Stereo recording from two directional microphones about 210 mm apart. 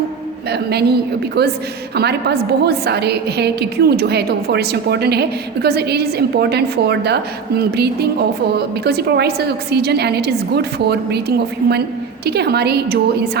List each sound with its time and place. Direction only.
0.5 s a woman's voice: 50° right (ahead or behind)